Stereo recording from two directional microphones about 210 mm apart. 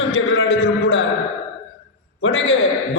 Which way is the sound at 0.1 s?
65° left (ahead or behind).